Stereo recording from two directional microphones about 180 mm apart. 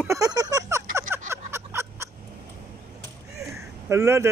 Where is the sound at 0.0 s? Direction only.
15° right (ahead or behind).